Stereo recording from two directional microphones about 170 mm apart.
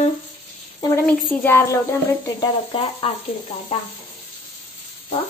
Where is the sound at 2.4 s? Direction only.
30° left (ahead or behind).